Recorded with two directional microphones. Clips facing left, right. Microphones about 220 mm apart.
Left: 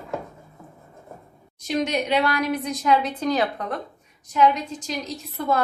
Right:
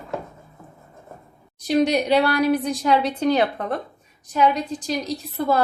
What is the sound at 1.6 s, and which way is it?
A woman's voice, 35° right (ahead or behind).